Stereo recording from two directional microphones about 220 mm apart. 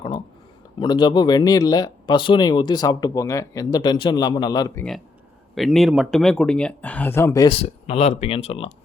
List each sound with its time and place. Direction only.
0.8 s speech: 20° left (ahead or behind)
5.5 s speech: centre (ahead or behind); by 8.7 s 25° left (ahead or behind)